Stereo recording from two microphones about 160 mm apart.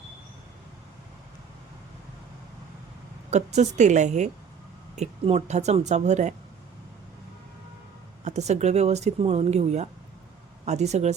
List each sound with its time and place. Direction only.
3.2 s speech: 45° right (ahead or behind)
8.2 s speech: 45° right (ahead or behind)